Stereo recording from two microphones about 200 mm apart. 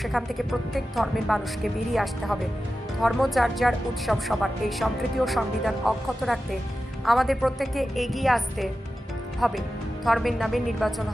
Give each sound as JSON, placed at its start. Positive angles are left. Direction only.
{"t": 0.0, "sound": "a woman's voice", "side_deg": 0}